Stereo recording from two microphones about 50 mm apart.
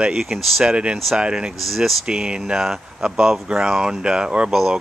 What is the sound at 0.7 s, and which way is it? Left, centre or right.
Speech, right.